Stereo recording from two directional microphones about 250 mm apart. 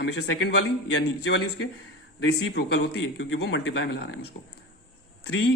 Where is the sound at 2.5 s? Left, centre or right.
Left.